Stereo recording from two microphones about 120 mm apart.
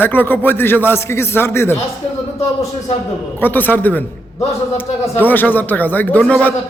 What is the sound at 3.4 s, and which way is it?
Speech, 15° left (ahead or behind).